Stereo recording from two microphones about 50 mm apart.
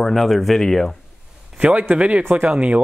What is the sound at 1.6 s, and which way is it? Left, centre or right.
A man's voice, right.